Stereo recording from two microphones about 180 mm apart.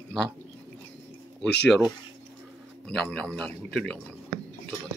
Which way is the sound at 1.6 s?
Centre (ahead or behind).